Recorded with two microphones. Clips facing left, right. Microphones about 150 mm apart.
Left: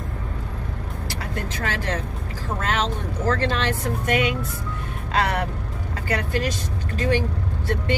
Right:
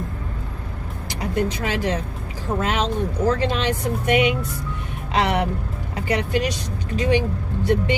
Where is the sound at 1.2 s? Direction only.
15° right (ahead or behind).